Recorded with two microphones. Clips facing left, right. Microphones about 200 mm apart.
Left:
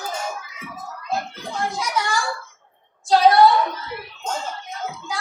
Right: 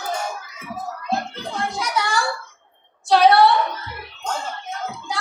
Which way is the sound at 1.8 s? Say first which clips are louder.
Right 3 dB; 65° right (ahead or behind).